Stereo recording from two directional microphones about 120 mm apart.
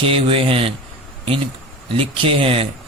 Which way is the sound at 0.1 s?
50° right (ahead or behind).